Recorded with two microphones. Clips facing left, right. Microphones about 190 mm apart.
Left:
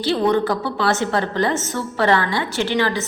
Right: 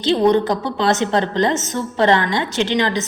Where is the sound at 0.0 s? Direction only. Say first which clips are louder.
Right 3 dB; 20° right (ahead or behind).